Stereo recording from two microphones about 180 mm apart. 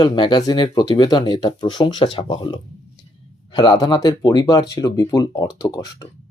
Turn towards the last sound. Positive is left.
turn(degrees=20)  # may be behind; listen again after turning